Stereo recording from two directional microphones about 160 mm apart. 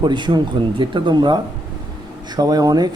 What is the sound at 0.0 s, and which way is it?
Speech, 30° right (ahead or behind).